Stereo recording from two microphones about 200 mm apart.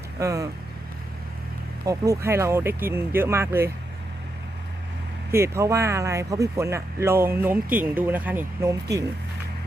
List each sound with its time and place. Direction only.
0.2 s speech: 15° right (ahead or behind)
1.9 s speech: 15° right (ahead or behind)
5.3 s speech: 15° right (ahead or behind)